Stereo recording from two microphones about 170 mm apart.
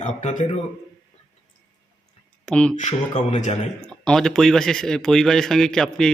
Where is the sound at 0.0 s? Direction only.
45° left (ahead or behind).